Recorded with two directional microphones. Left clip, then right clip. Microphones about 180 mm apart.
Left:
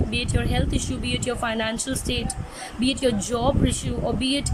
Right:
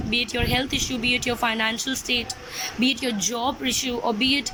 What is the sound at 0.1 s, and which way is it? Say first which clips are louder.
Speech: right 9 dB; 15° left (ahead or behind).